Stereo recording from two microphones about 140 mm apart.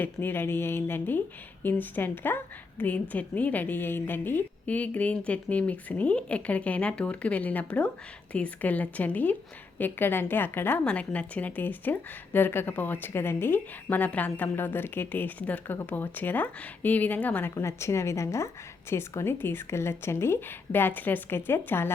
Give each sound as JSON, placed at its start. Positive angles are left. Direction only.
{"t": 0.0, "sound": "a woman's voice", "side_deg": 15}